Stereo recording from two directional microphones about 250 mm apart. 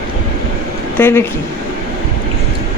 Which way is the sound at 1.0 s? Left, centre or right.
Centre.